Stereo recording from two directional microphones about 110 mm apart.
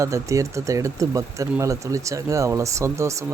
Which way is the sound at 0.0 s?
30° right (ahead or behind).